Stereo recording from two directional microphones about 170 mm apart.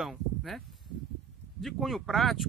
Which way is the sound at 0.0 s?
Centre (ahead or behind).